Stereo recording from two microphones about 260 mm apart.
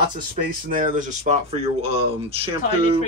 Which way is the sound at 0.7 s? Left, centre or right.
Right.